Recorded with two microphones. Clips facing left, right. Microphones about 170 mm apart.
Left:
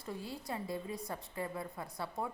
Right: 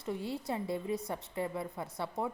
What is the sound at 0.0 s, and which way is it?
A woman's voice, 25° right (ahead or behind).